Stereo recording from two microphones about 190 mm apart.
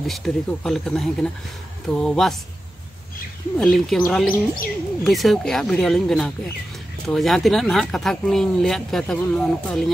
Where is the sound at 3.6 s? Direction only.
5° left (ahead or behind).